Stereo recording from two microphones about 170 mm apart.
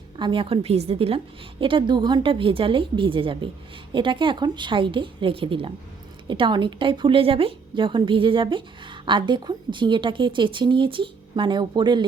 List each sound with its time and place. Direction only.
0.2 s a woman's voice: 30° right (ahead or behind)